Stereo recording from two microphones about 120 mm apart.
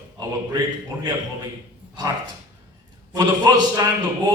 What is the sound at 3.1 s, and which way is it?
A man's voice, 35° right (ahead or behind).